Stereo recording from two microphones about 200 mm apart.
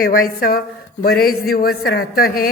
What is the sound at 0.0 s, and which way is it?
A woman's voice, 45° left (ahead or behind).